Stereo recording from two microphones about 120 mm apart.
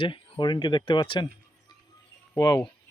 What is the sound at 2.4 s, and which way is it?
Speech, 25° left (ahead or behind).